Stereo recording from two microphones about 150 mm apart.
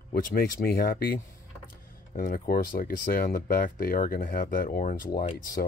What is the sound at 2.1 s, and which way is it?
Speech, 70° left (ahead or behind).